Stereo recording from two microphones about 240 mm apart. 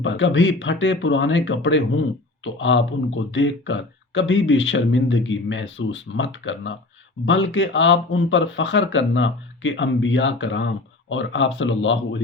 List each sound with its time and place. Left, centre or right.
0.0 s speech: left